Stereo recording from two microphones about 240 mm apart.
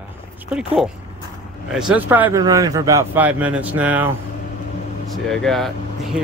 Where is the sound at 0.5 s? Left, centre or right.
Centre.